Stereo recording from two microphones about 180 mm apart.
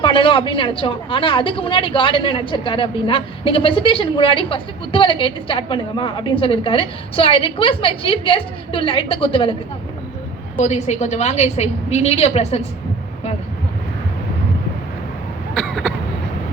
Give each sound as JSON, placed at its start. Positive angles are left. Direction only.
{"t": 0.0, "sound": "a woman's voice", "side_deg": 30}
{"t": 10.6, "sound": "a woman's voice", "side_deg": 40}
{"t": 15.5, "sound": "cough", "side_deg": 0}